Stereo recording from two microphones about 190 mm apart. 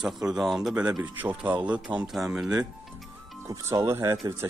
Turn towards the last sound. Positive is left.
turn(degrees=-15)  # may be behind; listen again after turning